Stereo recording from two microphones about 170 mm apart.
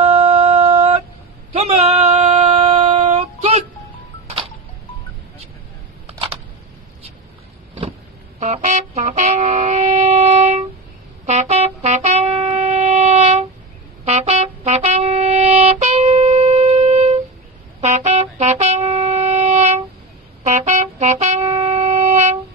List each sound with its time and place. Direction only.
0.0 s a sound: 40° right (ahead or behind)
6.0 s camera: 35° right (ahead or behind)
8.4 s wind instrument: 40° right (ahead or behind)
11.2 s music: 40° right (ahead or behind)
17.7 s shofar: 40° right (ahead or behind)
20.4 s brass instrument: 45° right (ahead or behind)
21.5 s wind instrument: 40° right (ahead or behind)